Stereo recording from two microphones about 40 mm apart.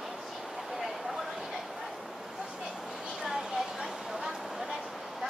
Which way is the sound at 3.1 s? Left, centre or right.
Centre.